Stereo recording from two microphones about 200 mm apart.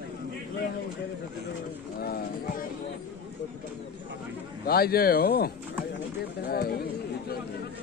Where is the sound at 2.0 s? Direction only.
50° left (ahead or behind).